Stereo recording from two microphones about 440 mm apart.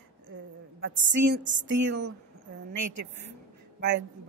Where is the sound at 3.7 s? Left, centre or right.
Right.